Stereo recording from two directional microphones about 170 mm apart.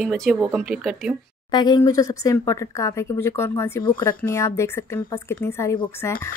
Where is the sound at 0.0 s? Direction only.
Centre (ahead or behind).